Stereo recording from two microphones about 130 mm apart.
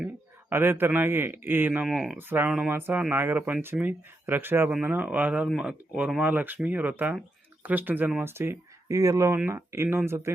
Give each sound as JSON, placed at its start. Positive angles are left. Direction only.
{"t": 0.5, "sound": "speech", "side_deg": -15}
{"t": 1.9, "sound": "speech", "side_deg": 0}
{"t": 2.1, "sound": "speech", "side_deg": -15}